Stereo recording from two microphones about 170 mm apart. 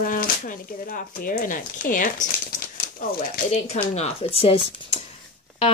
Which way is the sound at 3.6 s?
40° left (ahead or behind).